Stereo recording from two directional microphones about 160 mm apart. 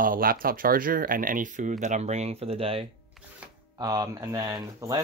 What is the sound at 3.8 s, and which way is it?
Speech, 20° right (ahead or behind).